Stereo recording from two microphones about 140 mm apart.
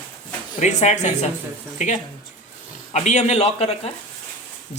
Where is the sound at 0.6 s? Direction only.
55° left (ahead or behind).